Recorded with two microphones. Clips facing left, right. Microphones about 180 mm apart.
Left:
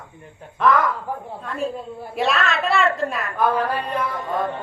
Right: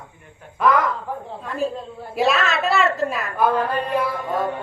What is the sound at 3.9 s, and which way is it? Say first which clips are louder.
Mantra: right 2 dB; 10° right (ahead or behind).